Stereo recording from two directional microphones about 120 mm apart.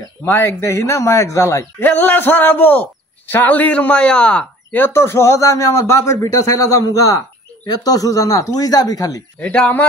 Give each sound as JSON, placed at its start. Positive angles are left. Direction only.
{"t": 0.2, "sound": "a man's voice", "side_deg": 20}
{"t": 1.9, "sound": "a man's voice", "side_deg": 15}
{"t": 9.4, "sound": "speech", "side_deg": 10}